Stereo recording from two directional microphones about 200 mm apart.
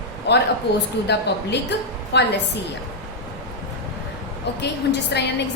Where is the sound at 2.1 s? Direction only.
55° left (ahead or behind).